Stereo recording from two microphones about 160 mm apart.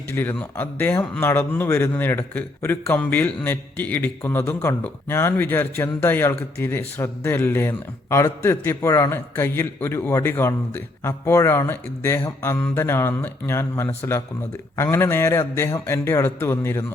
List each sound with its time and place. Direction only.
0.1 s speech: 15° left (ahead or behind)